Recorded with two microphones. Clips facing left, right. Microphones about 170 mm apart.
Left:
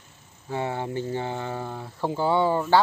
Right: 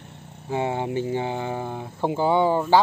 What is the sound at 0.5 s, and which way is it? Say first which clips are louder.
Speech: right 3 dB; 15° right (ahead or behind).